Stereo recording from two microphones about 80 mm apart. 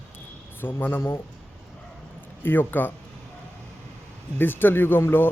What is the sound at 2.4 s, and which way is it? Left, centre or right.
Speech, left.